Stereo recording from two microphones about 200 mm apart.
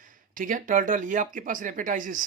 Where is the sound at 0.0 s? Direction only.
40° right (ahead or behind).